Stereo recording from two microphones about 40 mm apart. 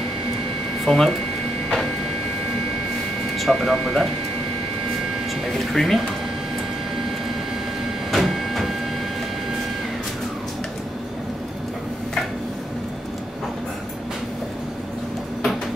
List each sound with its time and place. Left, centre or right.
0.8 s speech: centre
3.3 s speech: centre
5.5 s speech: centre
8.1 s train: centre